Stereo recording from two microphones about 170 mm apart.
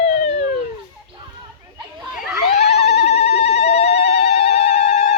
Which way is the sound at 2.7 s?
40° left (ahead or behind).